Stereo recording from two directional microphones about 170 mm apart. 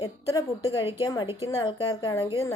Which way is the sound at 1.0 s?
25° left (ahead or behind).